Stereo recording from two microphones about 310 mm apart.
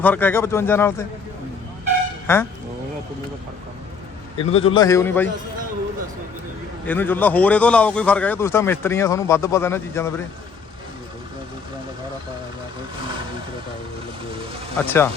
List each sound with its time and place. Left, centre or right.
0.0 s a man's voice: centre
2.2 s speech: centre
4.4 s a man's voice: centre
6.8 s a man's voice: centre
14.8 s a man's voice: centre